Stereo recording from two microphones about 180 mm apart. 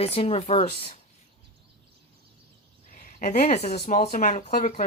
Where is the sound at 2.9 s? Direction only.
45° left (ahead or behind).